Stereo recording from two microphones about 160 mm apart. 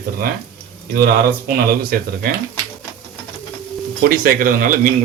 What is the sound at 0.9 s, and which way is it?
Speech, 70° right (ahead or behind).